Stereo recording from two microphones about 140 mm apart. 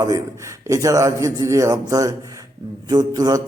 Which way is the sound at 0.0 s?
25° right (ahead or behind).